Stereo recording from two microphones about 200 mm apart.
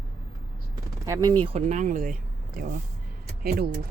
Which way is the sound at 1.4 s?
35° right (ahead or behind).